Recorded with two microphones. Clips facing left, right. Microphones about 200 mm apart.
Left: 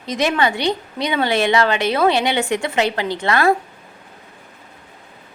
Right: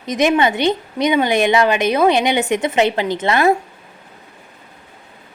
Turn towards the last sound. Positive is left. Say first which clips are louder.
# right 2 dB
turn(degrees=-20)  # may be behind; listen again after turning